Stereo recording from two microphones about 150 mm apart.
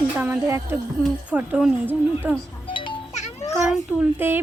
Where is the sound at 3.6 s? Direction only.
10° right (ahead or behind).